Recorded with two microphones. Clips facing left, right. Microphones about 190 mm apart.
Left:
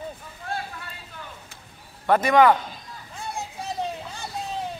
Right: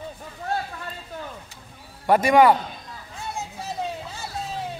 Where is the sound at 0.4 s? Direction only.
40° right (ahead or behind).